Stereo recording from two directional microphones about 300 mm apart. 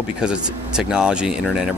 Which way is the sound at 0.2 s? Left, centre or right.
Centre.